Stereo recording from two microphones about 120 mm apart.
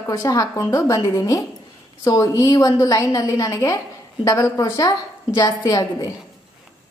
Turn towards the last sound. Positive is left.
turn(degrees=30)  # may be behind; listen again after turning